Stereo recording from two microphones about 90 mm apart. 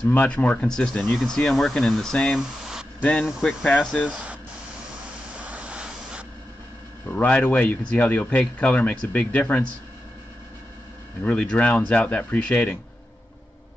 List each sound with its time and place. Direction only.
0.0 s speech: 15° left (ahead or behind); by 2.9 s 5° right (ahead or behind)
3.0 s speech: 10° left (ahead or behind)
3.3 s speech: 5° right (ahead or behind)
3.6 s speech: 10° left (ahead or behind)
4.1 s speech: 15° right (ahead or behind)
5.4 s vehicle: 15° right (ahead or behind)
7.1 s speech: 15° left (ahead or behind)
11.2 s speech: 15° left (ahead or behind)